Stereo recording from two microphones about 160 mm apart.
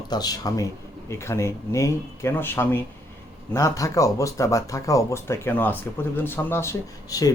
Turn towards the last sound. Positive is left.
turn(degrees=20)  # may be behind; listen again after turning